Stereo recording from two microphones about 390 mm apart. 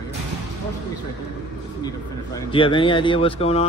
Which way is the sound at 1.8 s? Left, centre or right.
Centre.